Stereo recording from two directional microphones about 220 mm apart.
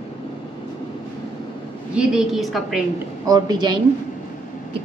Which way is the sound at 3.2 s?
20° right (ahead or behind).